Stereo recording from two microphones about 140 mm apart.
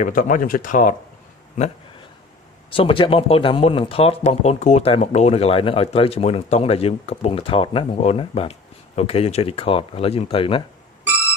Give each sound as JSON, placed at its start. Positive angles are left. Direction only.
{"t": 0.0, "sound": "speech", "side_deg": 75}
{"t": 2.7, "sound": "speech", "side_deg": 40}